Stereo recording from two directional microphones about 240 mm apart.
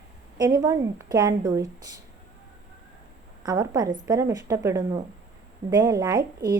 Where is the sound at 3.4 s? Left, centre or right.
Centre.